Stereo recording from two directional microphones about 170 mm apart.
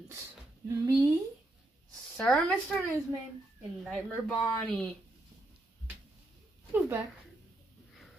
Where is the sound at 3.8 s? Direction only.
5° left (ahead or behind).